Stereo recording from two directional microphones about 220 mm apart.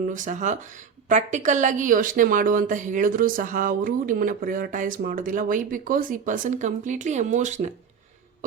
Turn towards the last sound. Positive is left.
turn(degrees=-35)  # may be behind; listen again after turning